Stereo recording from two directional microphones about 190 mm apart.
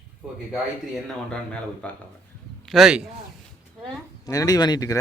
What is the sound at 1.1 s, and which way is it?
Speech, 5° left (ahead or behind).